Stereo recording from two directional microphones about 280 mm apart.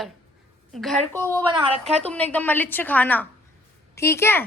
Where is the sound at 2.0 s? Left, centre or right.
Centre.